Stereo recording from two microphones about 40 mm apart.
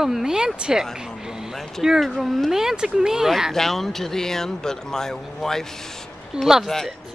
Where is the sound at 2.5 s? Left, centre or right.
Centre.